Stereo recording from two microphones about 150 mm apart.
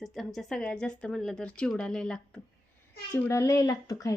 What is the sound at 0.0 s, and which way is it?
Speech, centre (ahead or behind).